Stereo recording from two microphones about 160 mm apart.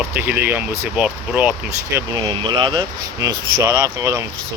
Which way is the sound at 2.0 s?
30° right (ahead or behind).